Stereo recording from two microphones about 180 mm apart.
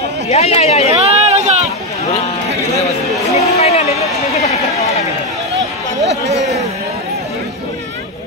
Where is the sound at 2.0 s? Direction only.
35° left (ahead or behind).